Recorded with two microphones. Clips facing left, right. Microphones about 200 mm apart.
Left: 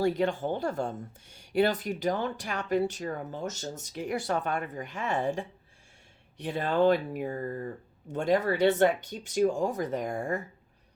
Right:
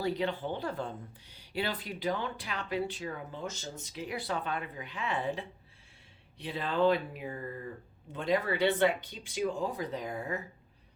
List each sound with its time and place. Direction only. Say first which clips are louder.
0.0 s speech: left 5 dB; 45° left (ahead or behind)